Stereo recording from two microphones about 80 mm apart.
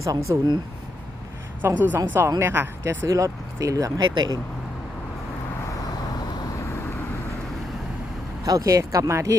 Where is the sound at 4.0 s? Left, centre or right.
Right.